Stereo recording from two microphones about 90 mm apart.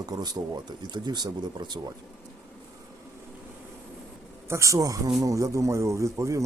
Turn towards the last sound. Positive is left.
turn(degrees=-35)  # may be behind; listen again after turning